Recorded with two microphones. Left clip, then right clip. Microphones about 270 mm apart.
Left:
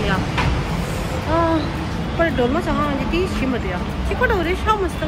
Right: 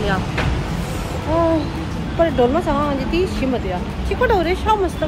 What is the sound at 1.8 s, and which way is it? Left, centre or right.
Speech, centre.